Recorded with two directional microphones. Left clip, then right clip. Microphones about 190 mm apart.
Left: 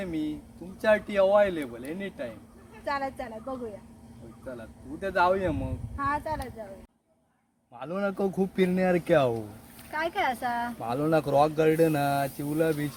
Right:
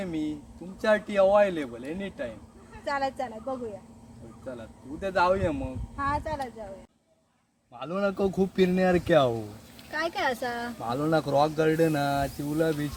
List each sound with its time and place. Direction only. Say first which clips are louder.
0.0 s a man's voice: even; centre (ahead or behind)
2.8 s a woman's voice: right 2 dB; 15° right (ahead or behind)
4.4 s a man's voice: right 1 dB; centre (ahead or behind)
6.0 s a woman's voice: even; 15° right (ahead or behind)
7.8 s a man's voice: right 2 dB; centre (ahead or behind)
9.9 s speech: even; 35° right (ahead or behind)
10.8 s speech: right 2 dB; 20° left (ahead or behind)